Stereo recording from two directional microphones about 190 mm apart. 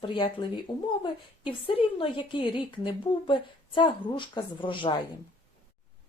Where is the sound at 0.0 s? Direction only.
25° left (ahead or behind).